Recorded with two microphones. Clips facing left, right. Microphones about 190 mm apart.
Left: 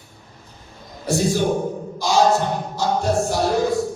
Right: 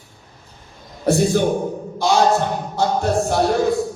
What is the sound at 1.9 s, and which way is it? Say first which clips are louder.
Music: right 1 dB; 60° right (ahead or behind).